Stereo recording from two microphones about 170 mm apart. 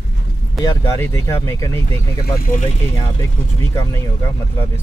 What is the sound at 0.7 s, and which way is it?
Speech, 15° left (ahead or behind).